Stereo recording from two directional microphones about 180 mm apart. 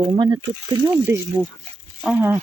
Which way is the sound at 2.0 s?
5° right (ahead or behind).